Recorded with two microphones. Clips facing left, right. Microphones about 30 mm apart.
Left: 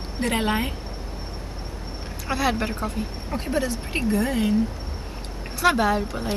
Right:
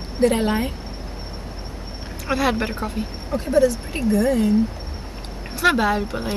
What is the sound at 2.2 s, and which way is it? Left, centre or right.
Speech, centre.